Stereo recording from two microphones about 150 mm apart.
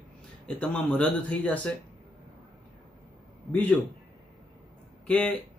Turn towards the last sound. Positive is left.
turn(degrees=10)  # may be behind; listen again after turning